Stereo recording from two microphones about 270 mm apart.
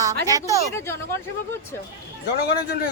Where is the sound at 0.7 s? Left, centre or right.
Centre.